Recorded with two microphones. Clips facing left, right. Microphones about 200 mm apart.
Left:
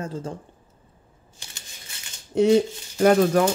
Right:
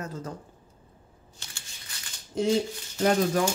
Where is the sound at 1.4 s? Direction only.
15° left (ahead or behind).